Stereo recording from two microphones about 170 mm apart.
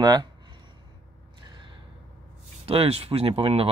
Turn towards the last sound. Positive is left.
turn(degrees=-35)  # may be behind; listen again after turning